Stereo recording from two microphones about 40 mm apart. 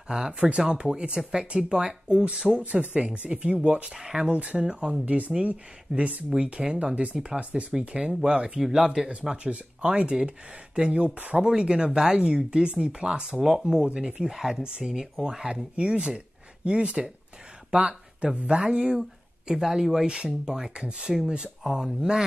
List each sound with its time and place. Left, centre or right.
0.1 s speech: centre
2.6 s speech: right
2.9 s speech: right
3.9 s speech: centre
4.3 s speech: right
5.0 s speech: right
7.3 s speech: centre
8.5 s speech: centre
9.4 s speech: right; by 14.6 s centre
14.6 s speech: right
21.1 s speech: centre
21.6 s speech: centre